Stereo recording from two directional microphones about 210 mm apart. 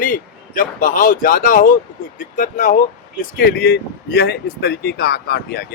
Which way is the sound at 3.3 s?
50° left (ahead or behind).